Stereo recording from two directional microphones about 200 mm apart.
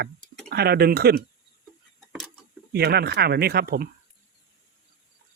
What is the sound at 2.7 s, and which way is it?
Speech, 55° right (ahead or behind).